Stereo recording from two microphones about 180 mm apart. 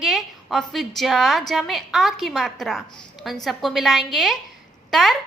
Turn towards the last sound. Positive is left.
turn(degrees=0)  # may be behind; listen again after turning